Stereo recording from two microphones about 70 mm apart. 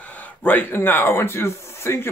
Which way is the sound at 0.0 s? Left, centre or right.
Left.